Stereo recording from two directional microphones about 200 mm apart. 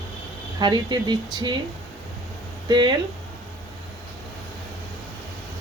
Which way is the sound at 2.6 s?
20° right (ahead or behind).